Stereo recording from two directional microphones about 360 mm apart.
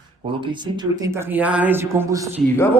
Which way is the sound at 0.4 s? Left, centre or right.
Centre.